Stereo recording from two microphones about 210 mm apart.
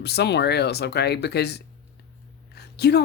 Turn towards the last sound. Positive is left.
turn(degrees=50)  # may be behind; listen again after turning